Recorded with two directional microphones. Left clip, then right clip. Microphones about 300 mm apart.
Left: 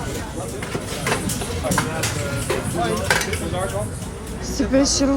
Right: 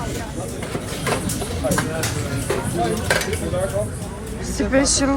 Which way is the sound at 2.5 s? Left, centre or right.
Centre.